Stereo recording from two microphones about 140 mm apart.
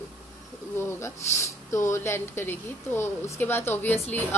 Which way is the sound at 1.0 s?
20° left (ahead or behind).